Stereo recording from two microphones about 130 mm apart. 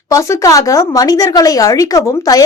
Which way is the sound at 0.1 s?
25° left (ahead or behind).